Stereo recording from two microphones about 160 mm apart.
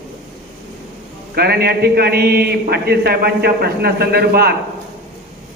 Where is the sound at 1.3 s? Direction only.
85° right.